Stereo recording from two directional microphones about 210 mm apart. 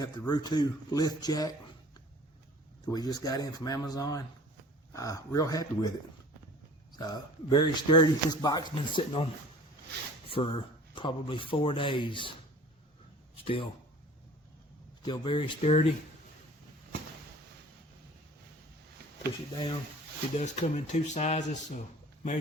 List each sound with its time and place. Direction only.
0.0 s speech: 20° left (ahead or behind)
2.8 s speech: 20° left (ahead or behind)
6.9 s speech: 20° left (ahead or behind)
13.3 s a sound: 25° left (ahead or behind)
15.0 s speech: 20° left (ahead or behind)
20.3 s speech: 35° left (ahead or behind)